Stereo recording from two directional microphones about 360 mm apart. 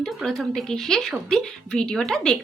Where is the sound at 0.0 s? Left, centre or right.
Centre.